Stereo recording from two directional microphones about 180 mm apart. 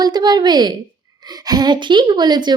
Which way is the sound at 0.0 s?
25° right (ahead or behind).